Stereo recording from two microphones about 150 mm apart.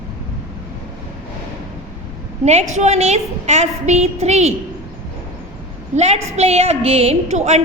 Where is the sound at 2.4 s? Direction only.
45° right (ahead or behind).